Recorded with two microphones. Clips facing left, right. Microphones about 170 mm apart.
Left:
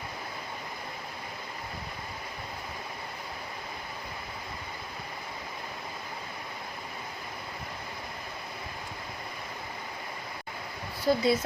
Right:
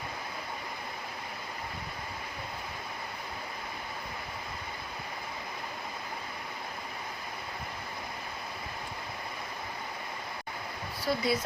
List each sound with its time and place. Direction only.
11.0 s speech: 25° left (ahead or behind)